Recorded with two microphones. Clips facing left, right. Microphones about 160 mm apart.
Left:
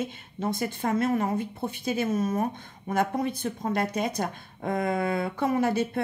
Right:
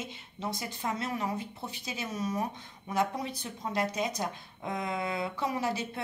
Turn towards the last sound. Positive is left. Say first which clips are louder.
# left 8 dB
turn(degrees=55)  # may be behind; listen again after turning